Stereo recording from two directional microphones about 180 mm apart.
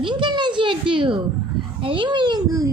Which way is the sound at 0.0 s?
25° right (ahead or behind).